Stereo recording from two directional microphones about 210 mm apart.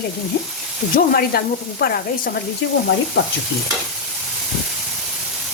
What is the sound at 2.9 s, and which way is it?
Frying, 70° left (ahead or behind).